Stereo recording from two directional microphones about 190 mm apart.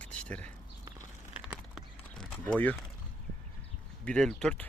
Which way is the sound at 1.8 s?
5° left (ahead or behind).